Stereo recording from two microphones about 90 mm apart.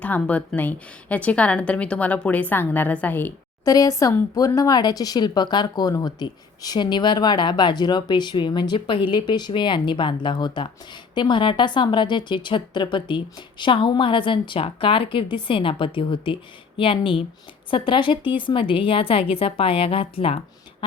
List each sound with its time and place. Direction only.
0.0 s a woman's voice: 15° left (ahead or behind)
3.6 s a woman's voice: 40° left (ahead or behind); by 20.3 s 90° left